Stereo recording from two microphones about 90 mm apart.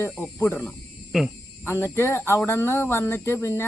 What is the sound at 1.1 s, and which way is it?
Speech, 5° right (ahead or behind).